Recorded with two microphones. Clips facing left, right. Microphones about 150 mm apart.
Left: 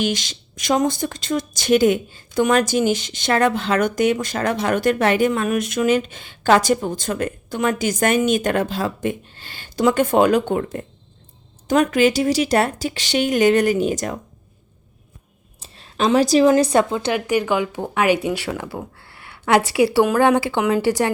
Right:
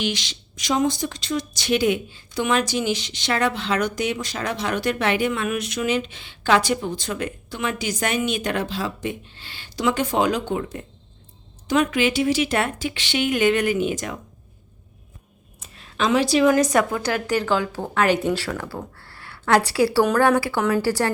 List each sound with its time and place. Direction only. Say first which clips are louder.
0.0 s a woman's voice: left 4 dB; 45° left (ahead or behind)
15.6 s a sound: left 3 dB; 35° left (ahead or behind)
16.5 s a woman's voice: left 3 dB; 30° left (ahead or behind)